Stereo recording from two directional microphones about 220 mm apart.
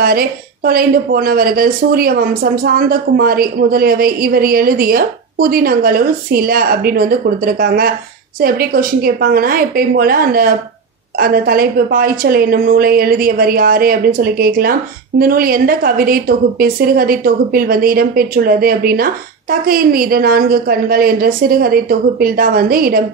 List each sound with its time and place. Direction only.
0.0 s a woman's voice: 40° right (ahead or behind)